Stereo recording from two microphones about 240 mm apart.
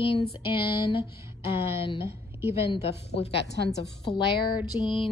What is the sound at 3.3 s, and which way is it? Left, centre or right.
A woman's voice, left.